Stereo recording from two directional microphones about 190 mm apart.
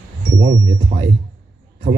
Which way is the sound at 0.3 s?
55° right (ahead or behind).